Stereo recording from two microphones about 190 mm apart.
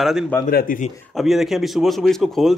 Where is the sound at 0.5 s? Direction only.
50° left (ahead or behind).